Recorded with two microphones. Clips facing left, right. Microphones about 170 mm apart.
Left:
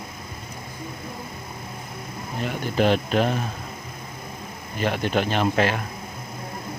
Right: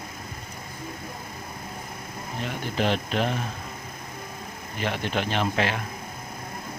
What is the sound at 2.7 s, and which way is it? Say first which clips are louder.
Speech: left 5 dB; 45° left (ahead or behind).